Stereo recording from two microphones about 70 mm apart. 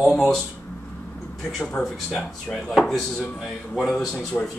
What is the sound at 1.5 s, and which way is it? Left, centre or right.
Speech, centre.